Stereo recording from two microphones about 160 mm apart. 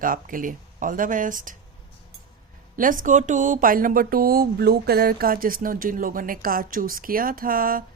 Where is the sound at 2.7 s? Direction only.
55° right (ahead or behind).